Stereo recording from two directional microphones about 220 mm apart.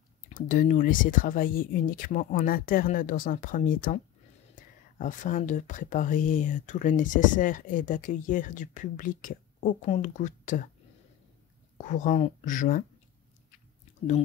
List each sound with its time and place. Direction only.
0.3 s speech: 40° left (ahead or behind)
11.8 s speech: 35° left (ahead or behind)